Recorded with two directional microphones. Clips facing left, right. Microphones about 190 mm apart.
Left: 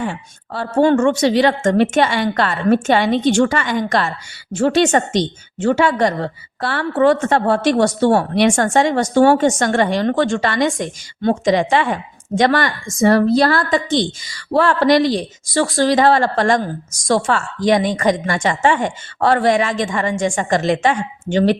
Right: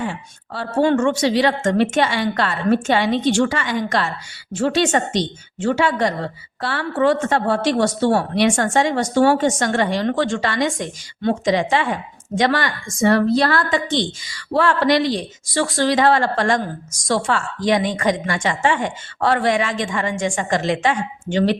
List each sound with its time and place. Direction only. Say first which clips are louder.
0.5 s a woman's voice: left 3 dB; 45° left (ahead or behind)